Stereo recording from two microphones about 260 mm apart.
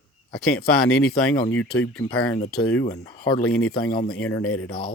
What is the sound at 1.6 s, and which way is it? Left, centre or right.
Speech, left.